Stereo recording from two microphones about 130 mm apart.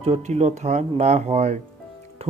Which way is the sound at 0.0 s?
55° right (ahead or behind).